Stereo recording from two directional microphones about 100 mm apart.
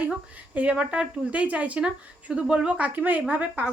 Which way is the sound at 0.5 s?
10° right (ahead or behind).